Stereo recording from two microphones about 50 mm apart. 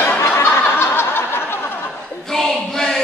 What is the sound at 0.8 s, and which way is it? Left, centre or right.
Snicker, left.